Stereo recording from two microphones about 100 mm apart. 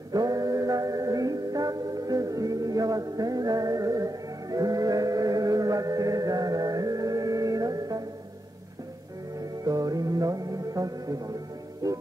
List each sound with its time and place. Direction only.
0.1 s music: 40° right (ahead or behind)
9.7 s music: 40° right (ahead or behind)